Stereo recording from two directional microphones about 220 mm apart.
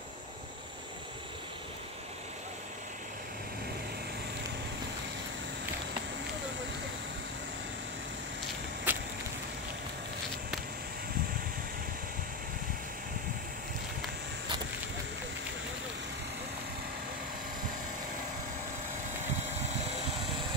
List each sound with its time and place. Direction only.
8.9 s vehicle: 10° right (ahead or behind)